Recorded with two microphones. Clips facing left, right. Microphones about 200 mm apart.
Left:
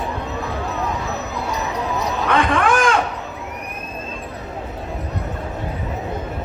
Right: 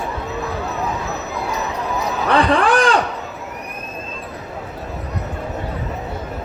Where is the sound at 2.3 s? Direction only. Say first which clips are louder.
Right 3 dB; 35° right (ahead or behind).